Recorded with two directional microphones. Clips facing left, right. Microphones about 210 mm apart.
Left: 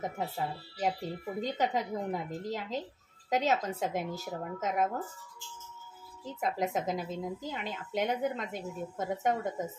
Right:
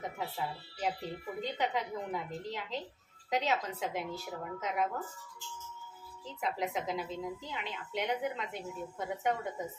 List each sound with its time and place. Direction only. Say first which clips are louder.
0.0 s a woman's voice: left 3 dB; 45° left (ahead or behind)
6.2 s a woman's voice: left 3 dB; 45° left (ahead or behind)